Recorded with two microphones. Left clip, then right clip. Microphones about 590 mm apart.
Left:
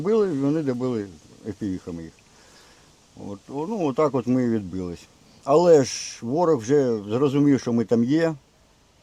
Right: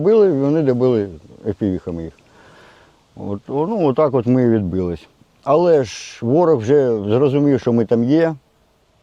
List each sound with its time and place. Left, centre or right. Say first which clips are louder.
0.0 s speech: right 8 dB; right
3.2 s speech: right 10 dB; right